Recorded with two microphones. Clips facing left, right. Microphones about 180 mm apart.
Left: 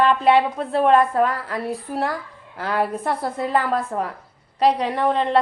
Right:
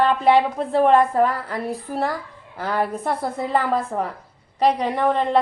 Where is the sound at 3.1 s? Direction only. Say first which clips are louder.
Even; 15° right (ahead or behind).